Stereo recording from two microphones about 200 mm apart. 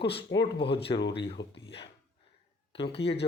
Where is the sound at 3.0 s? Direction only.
60° left (ahead or behind).